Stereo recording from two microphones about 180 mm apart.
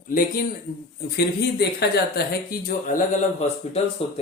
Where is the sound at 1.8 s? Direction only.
60° left (ahead or behind).